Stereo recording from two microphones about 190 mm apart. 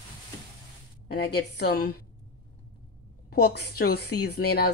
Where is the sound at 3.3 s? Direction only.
55° left (ahead or behind).